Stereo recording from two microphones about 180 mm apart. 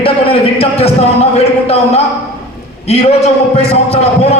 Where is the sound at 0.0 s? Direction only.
30° left (ahead or behind).